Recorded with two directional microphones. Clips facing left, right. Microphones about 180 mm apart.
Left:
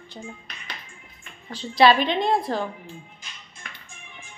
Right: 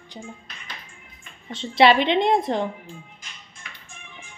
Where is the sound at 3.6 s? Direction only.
55° left (ahead or behind).